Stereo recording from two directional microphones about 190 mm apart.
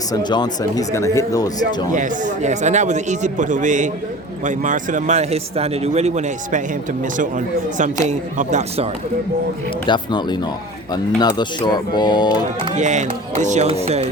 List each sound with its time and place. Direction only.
0.1 s speech: 20° left (ahead or behind)
1.9 s speech: 40° right (ahead or behind)
9.8 s speech: 25° left (ahead or behind)
12.7 s speech: 40° right (ahead or behind)